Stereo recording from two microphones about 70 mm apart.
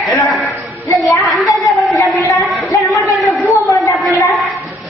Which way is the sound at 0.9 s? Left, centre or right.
Centre.